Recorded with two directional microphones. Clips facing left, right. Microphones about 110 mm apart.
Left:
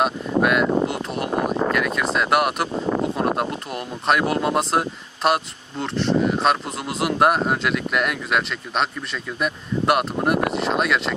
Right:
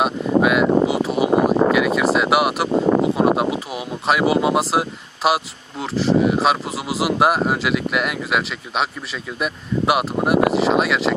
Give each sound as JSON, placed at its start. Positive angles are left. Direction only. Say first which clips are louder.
{"t": 0.0, "sound": "a sound", "louder": "right 3 dB", "side_deg": -5}
{"t": 2.1, "sound": "speech", "louder": "right 2 dB", "side_deg": -5}
{"t": 2.7, "sound": "speech", "louder": "right 7 dB", "side_deg": -60}
{"t": 3.0, "sound": "speech", "louder": "right 5 dB", "side_deg": -5}